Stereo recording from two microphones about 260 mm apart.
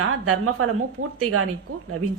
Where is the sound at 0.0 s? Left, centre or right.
Right.